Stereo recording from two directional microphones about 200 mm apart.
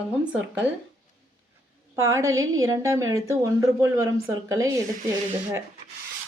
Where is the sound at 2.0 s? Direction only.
15° right (ahead or behind).